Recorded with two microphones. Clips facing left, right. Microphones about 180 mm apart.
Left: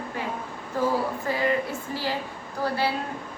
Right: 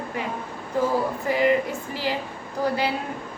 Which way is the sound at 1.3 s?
15° right (ahead or behind).